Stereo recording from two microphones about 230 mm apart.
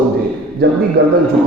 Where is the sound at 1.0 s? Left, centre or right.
Right.